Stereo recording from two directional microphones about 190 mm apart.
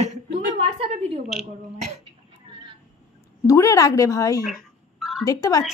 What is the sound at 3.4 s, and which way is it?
Speech, 15° left (ahead or behind).